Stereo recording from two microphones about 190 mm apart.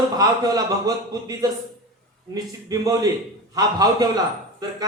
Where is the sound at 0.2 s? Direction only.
20° right (ahead or behind).